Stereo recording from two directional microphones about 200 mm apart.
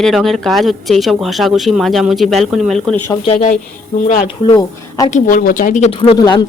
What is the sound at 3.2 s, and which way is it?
Speech, 35° left (ahead or behind).